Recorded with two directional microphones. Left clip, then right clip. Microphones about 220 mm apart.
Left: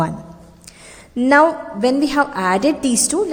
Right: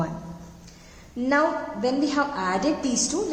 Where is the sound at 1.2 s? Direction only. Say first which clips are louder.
Left 9 dB; 45° left (ahead or behind).